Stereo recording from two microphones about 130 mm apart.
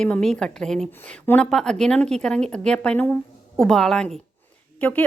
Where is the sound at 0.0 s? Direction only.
5° left (ahead or behind).